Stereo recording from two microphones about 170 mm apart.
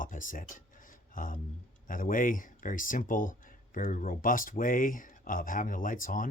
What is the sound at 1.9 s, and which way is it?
Speech, 55° left (ahead or behind).